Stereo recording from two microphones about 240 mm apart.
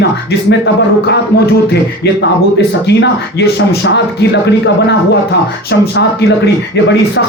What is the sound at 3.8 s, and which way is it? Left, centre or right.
A man's voice, left.